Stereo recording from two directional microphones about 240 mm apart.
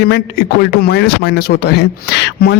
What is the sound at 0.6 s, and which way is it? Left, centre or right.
Speech, left.